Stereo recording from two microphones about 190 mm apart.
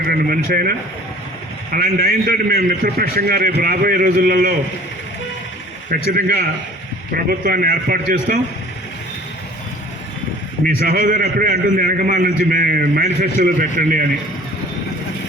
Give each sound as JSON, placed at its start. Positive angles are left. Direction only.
{"t": 0.0, "sound": "a man's voice", "side_deg": -50}
{"t": 6.1, "sound": "a man's voice", "side_deg": -50}
{"t": 10.8, "sound": "a man's voice", "side_deg": -50}